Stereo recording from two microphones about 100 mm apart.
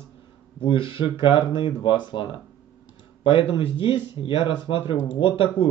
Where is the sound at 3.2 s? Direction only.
60° left (ahead or behind).